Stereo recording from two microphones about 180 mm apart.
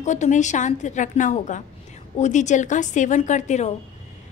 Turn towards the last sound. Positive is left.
turn(degrees=40)  # may be behind; listen again after turning